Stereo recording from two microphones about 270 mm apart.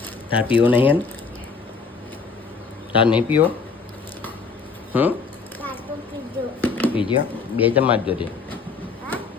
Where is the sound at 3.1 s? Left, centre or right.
Centre.